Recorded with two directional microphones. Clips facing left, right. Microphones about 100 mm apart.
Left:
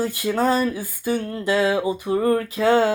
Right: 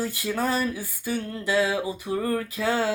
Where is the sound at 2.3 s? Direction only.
45° left (ahead or behind).